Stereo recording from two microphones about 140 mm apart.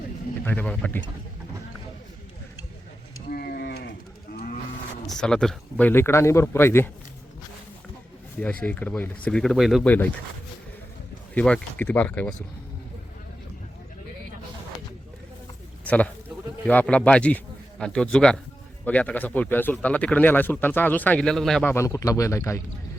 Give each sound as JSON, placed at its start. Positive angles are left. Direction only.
{"t": 0.4, "sound": "speech", "side_deg": 10}
{"t": 3.2, "sound": "a sound", "side_deg": 90}
{"t": 5.0, "sound": "speech", "side_deg": 5}
{"t": 8.6, "sound": "speech", "side_deg": 10}
{"t": 9.8, "sound": "speech", "side_deg": 10}
{"t": 11.3, "sound": "speech", "side_deg": 10}
{"t": 16.6, "sound": "a man's voice", "side_deg": 10}
{"t": 21.7, "sound": "speech", "side_deg": 20}